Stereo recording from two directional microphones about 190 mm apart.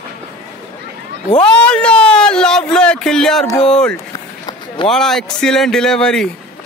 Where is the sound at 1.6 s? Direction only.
5° left (ahead or behind).